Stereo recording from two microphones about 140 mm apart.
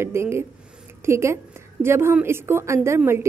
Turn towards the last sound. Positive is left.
turn(degrees=-15)  # may be behind; listen again after turning